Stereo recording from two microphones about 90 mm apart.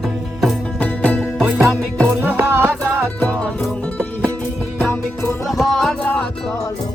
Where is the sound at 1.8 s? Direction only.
Centre (ahead or behind).